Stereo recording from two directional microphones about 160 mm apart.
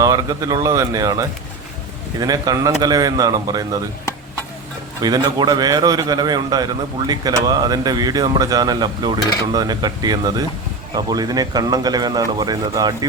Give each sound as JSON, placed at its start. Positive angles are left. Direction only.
{"t": 0.0, "sound": "a man's voice", "side_deg": -20}
{"t": 5.0, "sound": "a man's voice", "side_deg": -25}